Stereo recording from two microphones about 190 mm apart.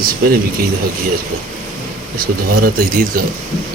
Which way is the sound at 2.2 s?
50° right (ahead or behind).